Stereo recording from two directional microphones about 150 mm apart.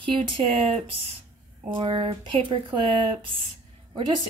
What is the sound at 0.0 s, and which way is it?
Speech, 40° right (ahead or behind).